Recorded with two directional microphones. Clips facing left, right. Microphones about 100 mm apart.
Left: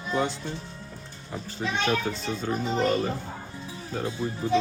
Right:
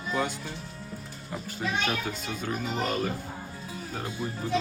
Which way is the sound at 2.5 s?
25° left (ahead or behind).